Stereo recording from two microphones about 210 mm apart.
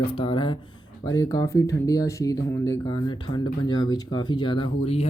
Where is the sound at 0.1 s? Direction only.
25° left (ahead or behind).